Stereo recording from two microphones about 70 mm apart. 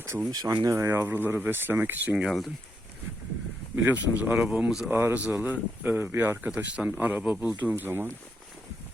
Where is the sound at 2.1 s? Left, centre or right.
Centre.